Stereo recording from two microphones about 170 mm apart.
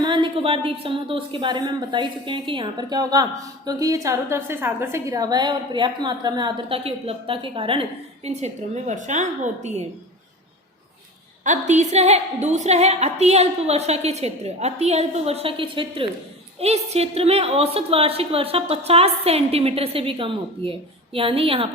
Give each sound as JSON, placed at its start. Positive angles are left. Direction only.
{"t": 0.0, "sound": "a woman's voice", "side_deg": -30}
{"t": 11.4, "sound": "a woman's voice", "side_deg": -45}